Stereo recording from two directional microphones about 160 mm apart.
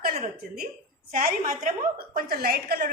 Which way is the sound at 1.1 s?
60° right (ahead or behind).